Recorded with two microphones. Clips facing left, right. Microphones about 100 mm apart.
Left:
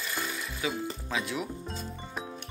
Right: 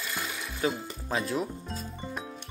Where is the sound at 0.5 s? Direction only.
40° right (ahead or behind).